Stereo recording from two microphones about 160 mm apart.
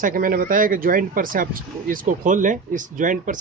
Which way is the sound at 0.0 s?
60° right (ahead or behind).